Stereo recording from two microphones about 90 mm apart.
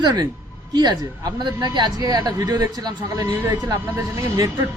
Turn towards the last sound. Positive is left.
turn(degrees=-40)  # may be behind; listen again after turning